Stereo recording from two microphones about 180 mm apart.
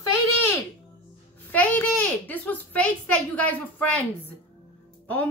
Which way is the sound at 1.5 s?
10° left (ahead or behind).